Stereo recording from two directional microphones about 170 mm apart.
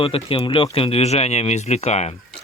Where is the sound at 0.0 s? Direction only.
30° left (ahead or behind).